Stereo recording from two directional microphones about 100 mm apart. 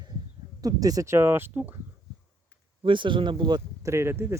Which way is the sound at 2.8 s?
55° right (ahead or behind).